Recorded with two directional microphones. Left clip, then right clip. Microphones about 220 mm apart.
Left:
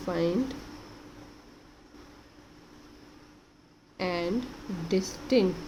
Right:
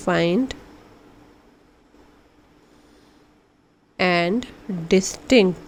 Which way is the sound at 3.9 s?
40° right (ahead or behind).